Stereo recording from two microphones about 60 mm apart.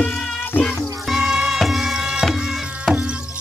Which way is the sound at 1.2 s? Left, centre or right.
Centre.